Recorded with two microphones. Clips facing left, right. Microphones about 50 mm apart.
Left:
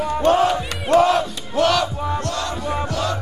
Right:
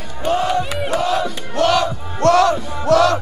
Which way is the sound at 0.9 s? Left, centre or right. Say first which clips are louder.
Left 5 dB; centre.